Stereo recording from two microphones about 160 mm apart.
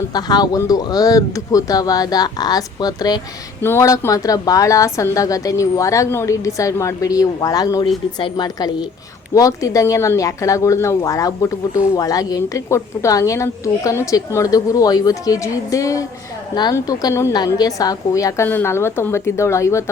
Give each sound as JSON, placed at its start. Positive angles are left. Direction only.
{"t": 0.1, "sound": "a woman's voice", "side_deg": 25}